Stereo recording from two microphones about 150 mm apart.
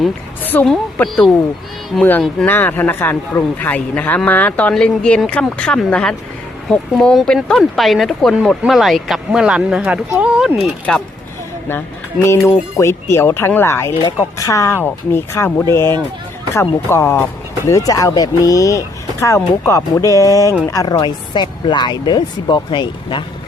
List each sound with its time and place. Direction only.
0.4 s a woman's voice: 15° left (ahead or behind)
0.7 s speech: centre (ahead or behind)
12.2 s speech: 20° left (ahead or behind)